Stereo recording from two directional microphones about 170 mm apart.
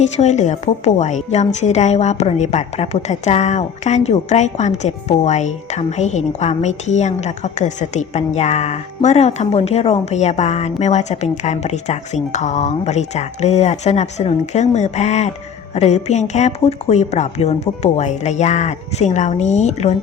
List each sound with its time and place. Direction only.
0.0 s a woman's voice: 45° left (ahead or behind)